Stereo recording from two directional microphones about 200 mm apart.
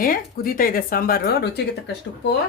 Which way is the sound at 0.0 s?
45° left (ahead or behind).